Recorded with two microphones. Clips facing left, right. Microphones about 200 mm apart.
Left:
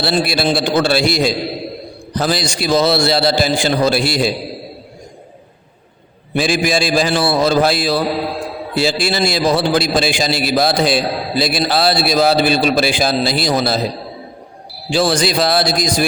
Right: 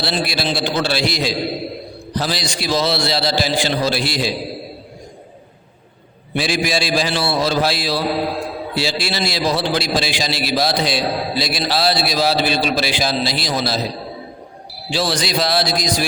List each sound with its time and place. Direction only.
0.0 s a man's voice: 50° left (ahead or behind)
6.3 s a man's voice: 50° left (ahead or behind)
14.9 s a man's voice: 50° left (ahead or behind)